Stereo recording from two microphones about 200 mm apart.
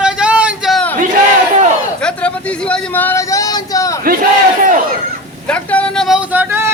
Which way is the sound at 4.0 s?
45° right (ahead or behind).